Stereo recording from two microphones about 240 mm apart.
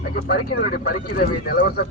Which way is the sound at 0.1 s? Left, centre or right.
Left.